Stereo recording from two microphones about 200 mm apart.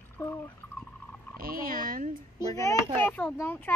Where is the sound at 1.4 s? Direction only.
45° right (ahead or behind).